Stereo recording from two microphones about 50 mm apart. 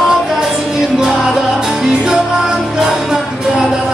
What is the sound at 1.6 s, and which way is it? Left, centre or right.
Music, centre.